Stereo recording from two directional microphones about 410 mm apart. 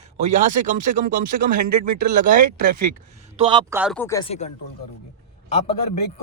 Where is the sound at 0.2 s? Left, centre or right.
Centre.